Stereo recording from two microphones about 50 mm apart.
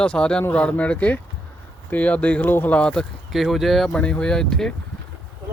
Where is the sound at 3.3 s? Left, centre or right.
Centre.